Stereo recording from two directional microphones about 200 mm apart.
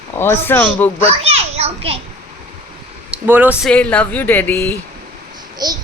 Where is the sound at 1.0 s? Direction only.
30° right (ahead or behind).